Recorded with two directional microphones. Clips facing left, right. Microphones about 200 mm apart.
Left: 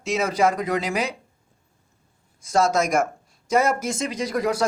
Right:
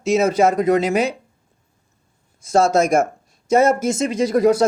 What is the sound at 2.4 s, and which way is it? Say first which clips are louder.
Speech: right 5 dB; 25° right (ahead or behind).